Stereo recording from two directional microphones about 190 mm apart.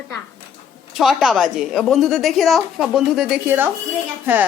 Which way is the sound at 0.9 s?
Centre (ahead or behind).